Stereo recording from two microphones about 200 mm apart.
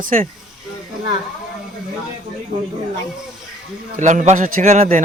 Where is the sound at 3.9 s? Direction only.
40° right (ahead or behind).